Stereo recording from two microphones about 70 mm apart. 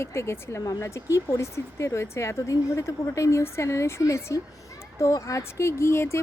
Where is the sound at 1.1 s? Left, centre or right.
Left.